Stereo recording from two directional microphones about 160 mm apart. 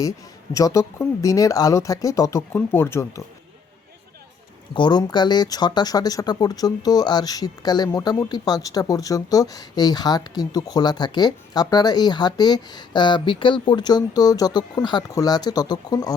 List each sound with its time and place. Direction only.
0.5 s speech: 20° left (ahead or behind)
4.7 s speech: 30° left (ahead or behind)